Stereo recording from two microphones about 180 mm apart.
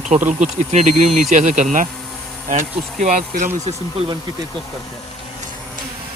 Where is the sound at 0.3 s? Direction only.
40° right (ahead or behind).